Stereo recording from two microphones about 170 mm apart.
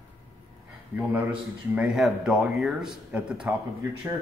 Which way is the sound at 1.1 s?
5° right (ahead or behind).